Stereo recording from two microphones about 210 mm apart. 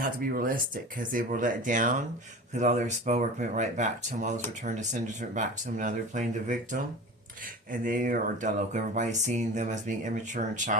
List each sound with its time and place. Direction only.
0.0 s speech: 45° right (ahead or behind)